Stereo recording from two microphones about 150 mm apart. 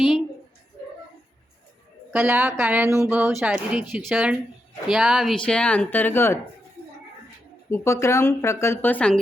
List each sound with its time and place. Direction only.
2.2 s a woman's voice: 15° right (ahead or behind); by 6.4 s 15° left (ahead or behind)
7.7 s speech: 20° left (ahead or behind)